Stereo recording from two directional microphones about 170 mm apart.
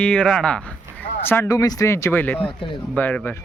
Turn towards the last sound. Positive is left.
turn(degrees=10)  # may be behind; listen again after turning